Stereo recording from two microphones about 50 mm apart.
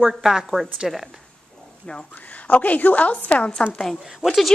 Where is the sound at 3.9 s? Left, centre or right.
Centre.